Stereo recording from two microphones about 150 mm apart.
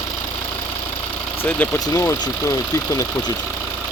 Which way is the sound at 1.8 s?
20° left (ahead or behind).